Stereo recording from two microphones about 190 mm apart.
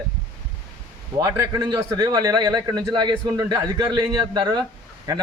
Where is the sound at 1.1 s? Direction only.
15° right (ahead or behind).